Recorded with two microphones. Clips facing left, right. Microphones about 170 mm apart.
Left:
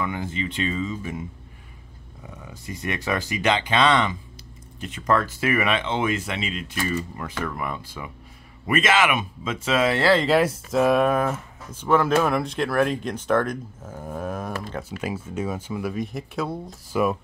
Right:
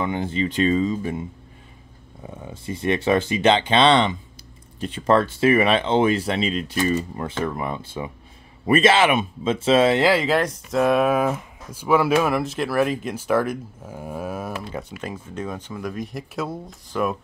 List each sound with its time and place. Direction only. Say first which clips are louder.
0.0 s speech: right 4 dB; 25° right (ahead or behind)
2.2 s speech: right 5 dB; 30° right (ahead or behind)
9.9 s speech: right 1 dB; 15° right (ahead or behind)
10.2 s speech: left 2 dB; centre (ahead or behind)
14.7 s speech: left 1 dB; 5° left (ahead or behind)